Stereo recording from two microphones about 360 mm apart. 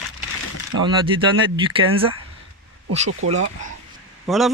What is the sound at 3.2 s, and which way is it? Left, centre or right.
Speech, right.